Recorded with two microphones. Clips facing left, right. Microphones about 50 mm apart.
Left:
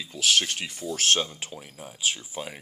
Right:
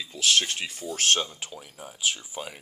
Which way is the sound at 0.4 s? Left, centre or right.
Centre.